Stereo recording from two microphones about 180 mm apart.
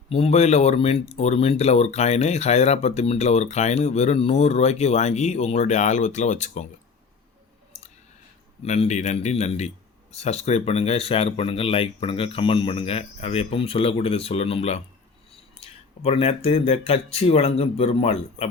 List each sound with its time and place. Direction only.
0.1 s speech: 35° left (ahead or behind)
7.7 s clicking: 40° left (ahead or behind)
8.6 s speech: 40° left (ahead or behind)